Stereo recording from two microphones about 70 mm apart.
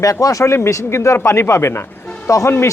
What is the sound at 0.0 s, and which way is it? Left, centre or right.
Speech, left.